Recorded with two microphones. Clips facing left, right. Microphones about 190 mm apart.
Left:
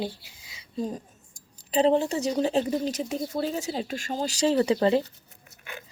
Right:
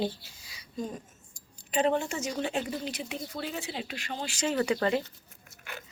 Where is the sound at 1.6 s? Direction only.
35° left (ahead or behind).